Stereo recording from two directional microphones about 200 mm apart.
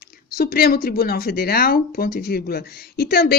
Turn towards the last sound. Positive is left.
turn(degrees=50)  # may be behind; listen again after turning